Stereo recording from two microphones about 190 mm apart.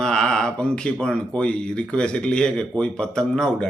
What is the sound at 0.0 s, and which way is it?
Speech, 5° left (ahead or behind).